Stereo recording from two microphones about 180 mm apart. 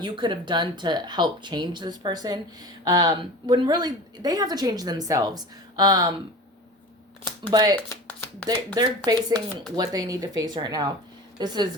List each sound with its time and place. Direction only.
0.0 s speech: 25° right (ahead or behind)
7.4 s speech: 25° right (ahead or behind)